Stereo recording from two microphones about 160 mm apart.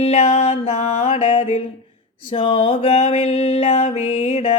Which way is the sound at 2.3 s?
30° left (ahead or behind).